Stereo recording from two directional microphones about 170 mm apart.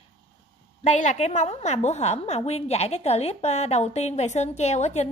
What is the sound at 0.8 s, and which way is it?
A woman's voice, 40° left (ahead or behind).